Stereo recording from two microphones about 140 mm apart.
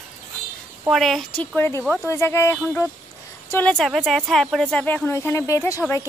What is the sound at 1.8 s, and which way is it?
Speech, centre (ahead or behind).